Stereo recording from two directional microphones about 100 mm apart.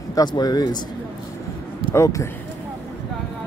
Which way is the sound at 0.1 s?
45° left (ahead or behind).